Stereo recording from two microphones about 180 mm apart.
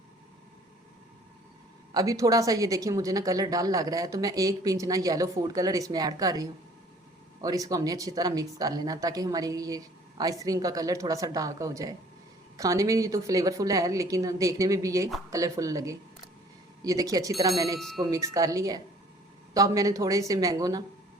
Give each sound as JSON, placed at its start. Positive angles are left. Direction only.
{"t": 1.9, "sound": "a woman's voice", "side_deg": -20}
{"t": 17.7, "sound": "speech", "side_deg": 0}
{"t": 18.0, "sound": "a woman's voice", "side_deg": -20}